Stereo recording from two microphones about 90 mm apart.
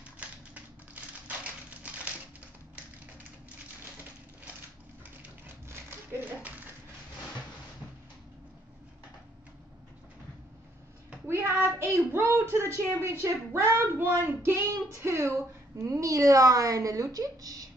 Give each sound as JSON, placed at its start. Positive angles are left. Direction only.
{"t": 1.2, "sound": "typewriter", "side_deg": -15}
{"t": 11.2, "sound": "a woman's voice", "side_deg": -30}